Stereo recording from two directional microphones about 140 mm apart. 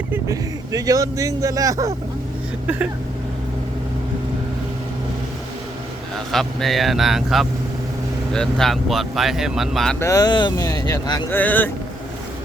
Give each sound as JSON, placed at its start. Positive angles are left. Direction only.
{"t": 0.1, "sound": "a man's voice", "side_deg": -25}
{"t": 2.6, "sound": "vehicle", "side_deg": -10}
{"t": 6.3, "sound": "speech", "side_deg": 0}
{"t": 10.0, "sound": "speech", "side_deg": 25}
{"t": 11.3, "sound": "speech", "side_deg": 10}